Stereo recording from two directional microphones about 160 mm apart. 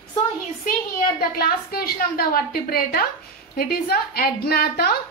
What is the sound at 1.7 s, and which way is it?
A woman's voice, 70° left (ahead or behind).